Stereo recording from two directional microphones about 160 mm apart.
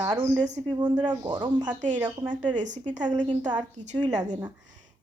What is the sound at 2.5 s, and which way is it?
Speech, 50° right (ahead or behind).